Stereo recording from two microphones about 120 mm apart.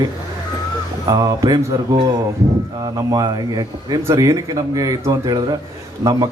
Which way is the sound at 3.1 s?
30° right (ahead or behind).